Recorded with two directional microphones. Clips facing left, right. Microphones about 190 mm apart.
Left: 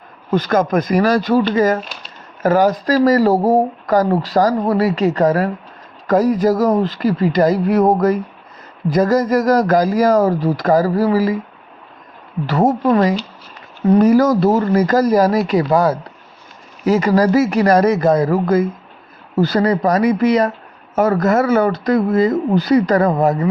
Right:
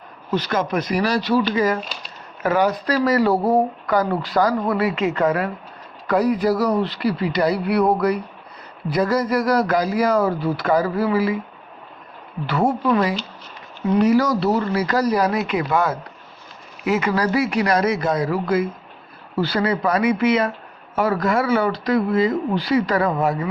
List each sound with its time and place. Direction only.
0.3 s speech: 45° left (ahead or behind)
12.5 s speech: 40° left (ahead or behind)